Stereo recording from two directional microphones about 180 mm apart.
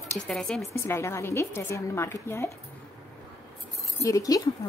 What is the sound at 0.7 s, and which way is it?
A woman's voice, 15° left (ahead or behind).